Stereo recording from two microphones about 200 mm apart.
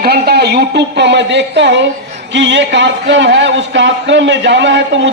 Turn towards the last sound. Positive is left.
turn(degrees=-65)  # may be behind; listen again after turning